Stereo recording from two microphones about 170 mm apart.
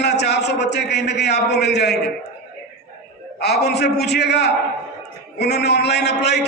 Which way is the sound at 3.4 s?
75° left (ahead or behind).